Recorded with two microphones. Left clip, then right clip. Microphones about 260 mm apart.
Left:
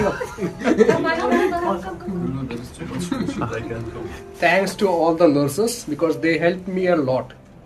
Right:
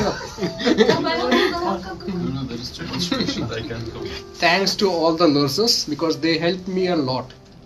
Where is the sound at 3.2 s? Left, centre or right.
Centre.